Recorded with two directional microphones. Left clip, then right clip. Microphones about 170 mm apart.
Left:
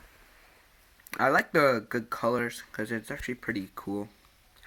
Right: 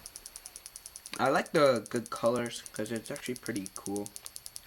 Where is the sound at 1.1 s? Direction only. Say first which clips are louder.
Left 4 dB; centre (ahead or behind); by 3.8 s 15° left (ahead or behind).